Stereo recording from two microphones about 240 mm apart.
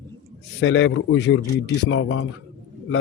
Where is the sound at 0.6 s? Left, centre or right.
Left.